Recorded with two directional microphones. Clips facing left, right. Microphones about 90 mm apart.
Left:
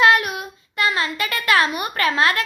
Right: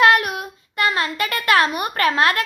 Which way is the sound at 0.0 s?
50° right (ahead or behind).